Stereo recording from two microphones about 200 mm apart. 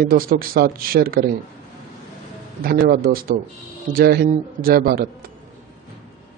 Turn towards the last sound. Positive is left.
turn(degrees=-50)  # may be behind; listen again after turning